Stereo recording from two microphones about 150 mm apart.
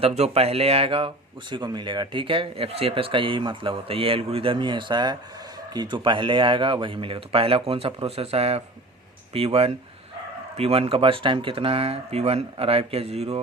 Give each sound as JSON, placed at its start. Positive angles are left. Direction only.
{"t": 0.0, "sound": "speech", "side_deg": -45}